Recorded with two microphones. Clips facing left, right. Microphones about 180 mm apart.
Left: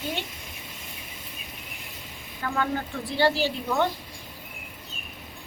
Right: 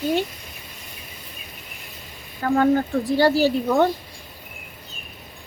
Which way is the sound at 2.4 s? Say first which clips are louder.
Right 10 dB; 40° right (ahead or behind).